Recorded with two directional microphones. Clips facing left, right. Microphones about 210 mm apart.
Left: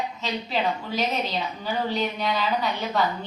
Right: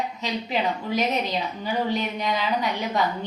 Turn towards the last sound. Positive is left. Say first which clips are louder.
# even
turn(degrees=-15)  # may be behind; listen again after turning